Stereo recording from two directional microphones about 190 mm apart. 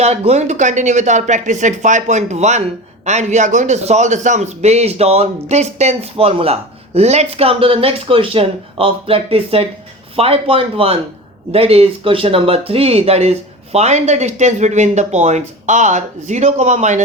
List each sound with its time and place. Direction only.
0.0 s speech: 35° right (ahead or behind)